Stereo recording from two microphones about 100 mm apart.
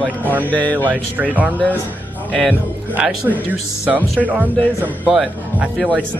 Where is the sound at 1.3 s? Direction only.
15° right (ahead or behind).